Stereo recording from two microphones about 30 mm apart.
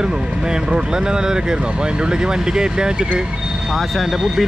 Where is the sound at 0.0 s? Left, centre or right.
Right.